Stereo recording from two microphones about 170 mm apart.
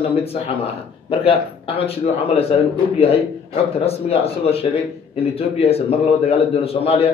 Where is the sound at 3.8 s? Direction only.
35° left (ahead or behind).